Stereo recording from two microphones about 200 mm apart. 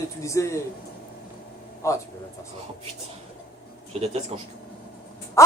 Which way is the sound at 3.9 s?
30° right (ahead or behind).